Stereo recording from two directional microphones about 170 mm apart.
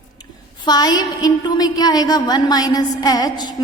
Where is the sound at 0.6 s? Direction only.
25° left (ahead or behind).